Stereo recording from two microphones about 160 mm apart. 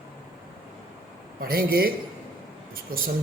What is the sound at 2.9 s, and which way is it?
Speech, 60° right (ahead or behind).